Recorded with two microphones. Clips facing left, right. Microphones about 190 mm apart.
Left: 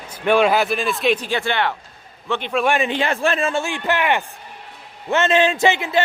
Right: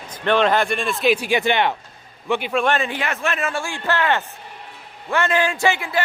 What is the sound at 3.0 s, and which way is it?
Speech, 30° left (ahead or behind).